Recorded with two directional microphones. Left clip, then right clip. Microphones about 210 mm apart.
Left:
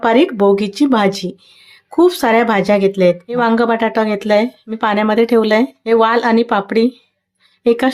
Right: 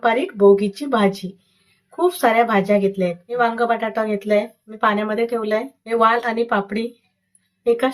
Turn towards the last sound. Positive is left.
turn(degrees=55)  # may be behind; listen again after turning